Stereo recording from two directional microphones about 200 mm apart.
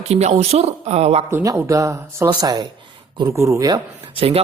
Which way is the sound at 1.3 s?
15° right (ahead or behind).